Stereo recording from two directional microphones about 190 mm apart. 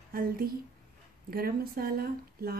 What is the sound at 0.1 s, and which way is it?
Speech, 50° right (ahead or behind).